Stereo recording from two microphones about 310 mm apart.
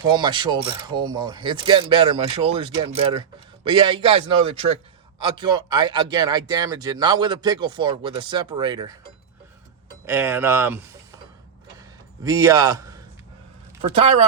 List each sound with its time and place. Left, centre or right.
0.0 s speech: centre
10.1 s speech: centre
11.8 s a sound: centre
13.9 s speech: centre